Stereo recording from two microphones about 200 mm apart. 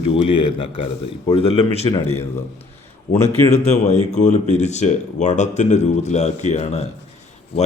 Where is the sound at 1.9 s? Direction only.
10° left (ahead or behind).